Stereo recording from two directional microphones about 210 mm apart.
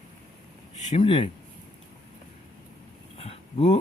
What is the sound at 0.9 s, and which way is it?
Speech, 25° left (ahead or behind).